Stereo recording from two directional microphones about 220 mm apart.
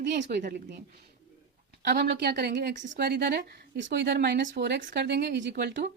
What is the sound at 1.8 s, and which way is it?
A woman's voice, 50° right (ahead or behind).